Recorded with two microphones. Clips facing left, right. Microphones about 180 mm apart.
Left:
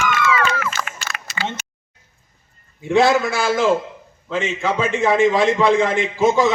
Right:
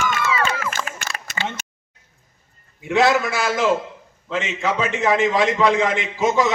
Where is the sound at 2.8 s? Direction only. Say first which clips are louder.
Left 2 dB; 30° left (ahead or behind).